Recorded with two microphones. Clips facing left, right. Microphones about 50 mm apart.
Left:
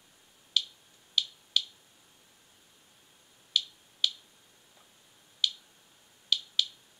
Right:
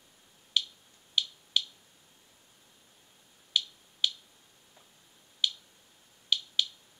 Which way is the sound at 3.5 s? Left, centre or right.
Centre.